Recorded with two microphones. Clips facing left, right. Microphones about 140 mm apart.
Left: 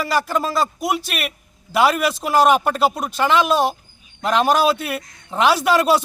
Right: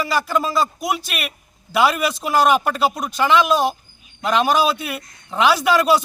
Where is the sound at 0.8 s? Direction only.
35° left (ahead or behind).